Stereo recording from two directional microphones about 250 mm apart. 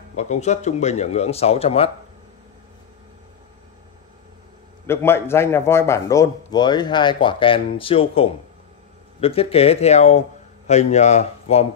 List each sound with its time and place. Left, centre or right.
0.1 s speech: left
4.8 s a man's voice: centre; by 11.6 s left